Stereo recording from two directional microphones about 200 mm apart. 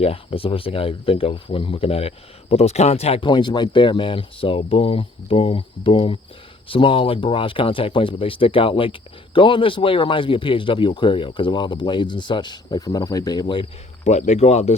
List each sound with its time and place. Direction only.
0.0 s speech: 30° left (ahead or behind)